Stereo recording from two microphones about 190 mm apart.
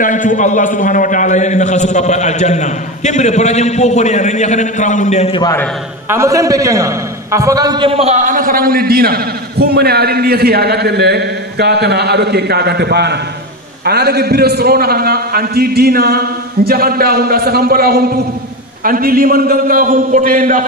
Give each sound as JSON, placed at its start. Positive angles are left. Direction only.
{"t": 0.0, "sound": "a man's voice", "side_deg": 40}
{"t": 5.4, "sound": "a man's voice", "side_deg": 15}
{"t": 6.0, "sound": "a man's voice", "side_deg": -15}